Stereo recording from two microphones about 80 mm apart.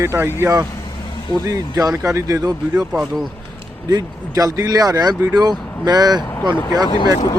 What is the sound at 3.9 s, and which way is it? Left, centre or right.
Speech, right.